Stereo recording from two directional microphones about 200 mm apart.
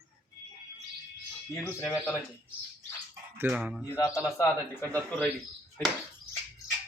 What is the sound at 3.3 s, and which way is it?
Speech, 5° right (ahead or behind).